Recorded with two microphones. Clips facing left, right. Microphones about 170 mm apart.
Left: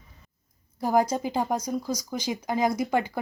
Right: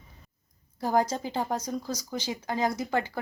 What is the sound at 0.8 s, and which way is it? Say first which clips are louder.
Speech: left 3 dB; 10° left (ahead or behind).